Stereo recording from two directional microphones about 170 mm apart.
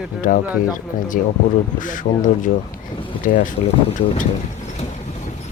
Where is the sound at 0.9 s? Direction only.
50° left (ahead or behind).